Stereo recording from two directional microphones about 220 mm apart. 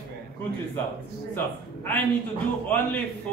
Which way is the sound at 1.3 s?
10° left (ahead or behind).